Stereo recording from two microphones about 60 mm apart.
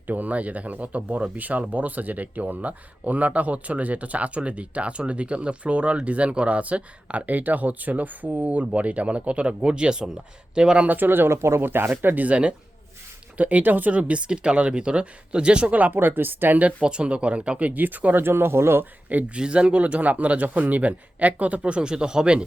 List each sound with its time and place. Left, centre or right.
0.1 s speech: right
10.8 s speech: right
19.0 s speech: right